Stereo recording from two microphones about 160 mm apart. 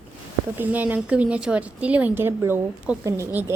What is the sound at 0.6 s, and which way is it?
A woman's voice, 10° right (ahead or behind).